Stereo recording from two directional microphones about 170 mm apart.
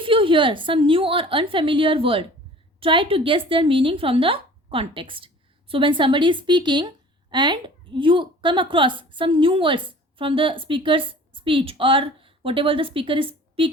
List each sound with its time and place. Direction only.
0.0 s a woman's voice: 30° right (ahead or behind)